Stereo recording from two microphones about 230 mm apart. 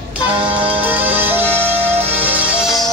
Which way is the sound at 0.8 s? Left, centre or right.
Centre.